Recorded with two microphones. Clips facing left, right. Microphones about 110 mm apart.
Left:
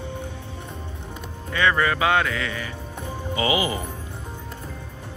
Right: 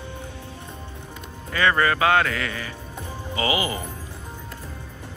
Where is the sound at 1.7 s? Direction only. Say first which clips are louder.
Right 1 dB; 15° left (ahead or behind).